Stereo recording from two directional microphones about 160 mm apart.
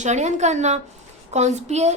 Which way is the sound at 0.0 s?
45° right (ahead or behind).